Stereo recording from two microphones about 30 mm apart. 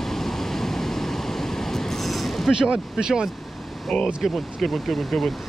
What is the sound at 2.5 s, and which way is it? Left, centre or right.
Speech, right.